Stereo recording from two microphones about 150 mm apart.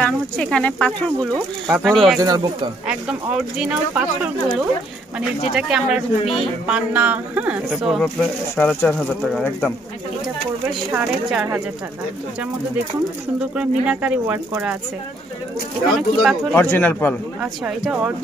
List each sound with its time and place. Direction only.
0.0 s speech: 5° left (ahead or behind)
2.1 s speech: 25° right (ahead or behind)
2.9 s speech: 5° right (ahead or behind)
5.5 s speech: 5° right (ahead or behind)
10.9 s speech: 10° right (ahead or behind)
13.6 s speech: 10° right (ahead or behind)
15.9 s speech: centre (ahead or behind)
16.5 s speech: 15° left (ahead or behind)
17.4 s speech: 5° right (ahead or behind)